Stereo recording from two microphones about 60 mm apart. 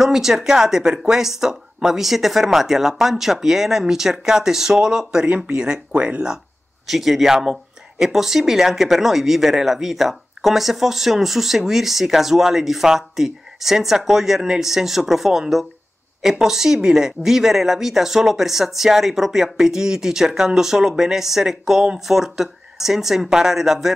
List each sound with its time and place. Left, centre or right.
0.0 s speech: centre
6.9 s speech: centre